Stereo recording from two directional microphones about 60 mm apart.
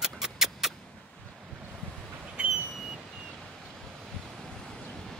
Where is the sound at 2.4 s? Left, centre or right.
Centre.